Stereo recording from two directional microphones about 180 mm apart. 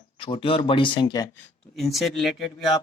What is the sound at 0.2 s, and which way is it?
Speech, 30° left (ahead or behind).